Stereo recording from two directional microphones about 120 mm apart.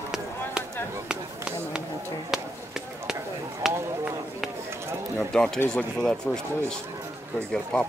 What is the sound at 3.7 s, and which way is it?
Speech, 20° right (ahead or behind).